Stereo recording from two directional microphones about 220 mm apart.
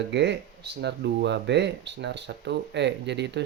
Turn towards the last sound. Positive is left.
turn(degrees=-50)  # may be behind; listen again after turning